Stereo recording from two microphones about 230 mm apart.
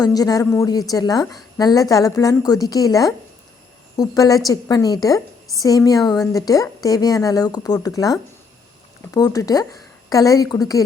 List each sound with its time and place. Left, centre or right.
0.0 s a woman's voice: centre